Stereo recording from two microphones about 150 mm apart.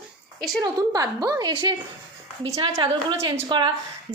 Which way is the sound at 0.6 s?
25° right (ahead or behind).